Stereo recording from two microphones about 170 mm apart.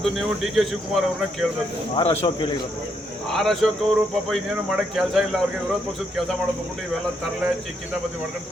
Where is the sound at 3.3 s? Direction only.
Centre (ahead or behind).